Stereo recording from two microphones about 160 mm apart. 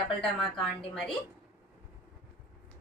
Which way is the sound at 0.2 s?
Centre (ahead or behind).